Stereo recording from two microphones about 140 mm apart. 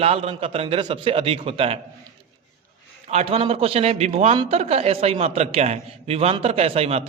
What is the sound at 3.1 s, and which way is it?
Speech, 50° right (ahead or behind).